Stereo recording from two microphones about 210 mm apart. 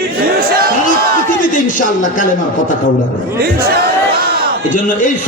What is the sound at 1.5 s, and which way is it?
Speech, 40° left (ahead or behind).